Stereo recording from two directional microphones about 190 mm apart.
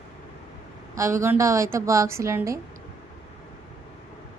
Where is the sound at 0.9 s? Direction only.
15° right (ahead or behind).